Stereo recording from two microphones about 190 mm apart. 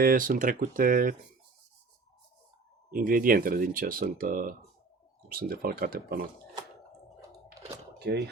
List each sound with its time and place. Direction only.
0.0 s speech: 45° right (ahead or behind)
2.9 s speech: 50° right (ahead or behind)
7.9 s speech: 60° right (ahead or behind)